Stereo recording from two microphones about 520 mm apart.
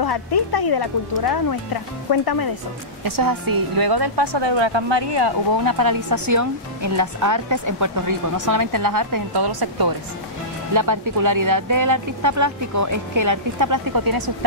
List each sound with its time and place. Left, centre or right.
0.0 s speech: left
3.0 s a woman's voice: right